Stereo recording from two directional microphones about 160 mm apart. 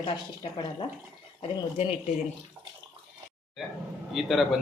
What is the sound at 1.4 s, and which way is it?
Speech, 40° left (ahead or behind).